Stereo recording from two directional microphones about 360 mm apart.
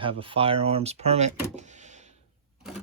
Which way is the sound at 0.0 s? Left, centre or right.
Centre.